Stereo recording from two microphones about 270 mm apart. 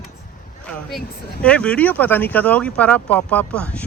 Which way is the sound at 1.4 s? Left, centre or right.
Centre.